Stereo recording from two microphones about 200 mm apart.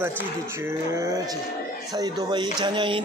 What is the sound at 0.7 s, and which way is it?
Speech, 15° right (ahead or behind).